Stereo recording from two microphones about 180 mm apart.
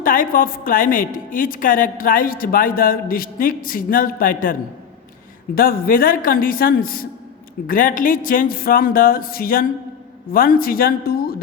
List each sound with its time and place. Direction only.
0.0 s a woman's voice: 50° left (ahead or behind)
5.5 s a woman's voice: 55° left (ahead or behind)